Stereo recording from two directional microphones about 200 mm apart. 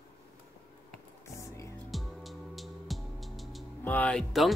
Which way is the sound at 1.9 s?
Centre (ahead or behind).